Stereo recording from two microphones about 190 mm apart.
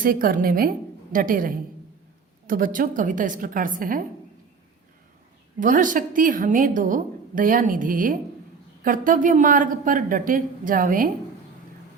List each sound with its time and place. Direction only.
0.0 s a woman's voice: 50° right (ahead or behind)
5.5 s a woman's voice: 45° right (ahead or behind)